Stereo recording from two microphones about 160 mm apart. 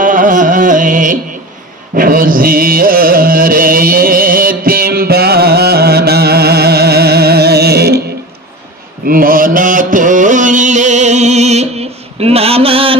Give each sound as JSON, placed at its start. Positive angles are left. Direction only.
{"t": 0.0, "sound": "carnatic music", "side_deg": -55}
{"t": 9.0, "sound": "mantra", "side_deg": -60}